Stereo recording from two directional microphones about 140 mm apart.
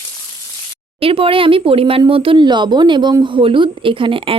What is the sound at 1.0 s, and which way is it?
Speech, 40° right (ahead or behind).